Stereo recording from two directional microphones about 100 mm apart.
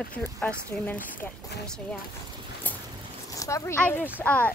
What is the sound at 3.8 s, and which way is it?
Speech, 20° left (ahead or behind).